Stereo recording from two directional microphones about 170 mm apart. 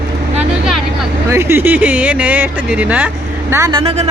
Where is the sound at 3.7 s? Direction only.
35° right (ahead or behind).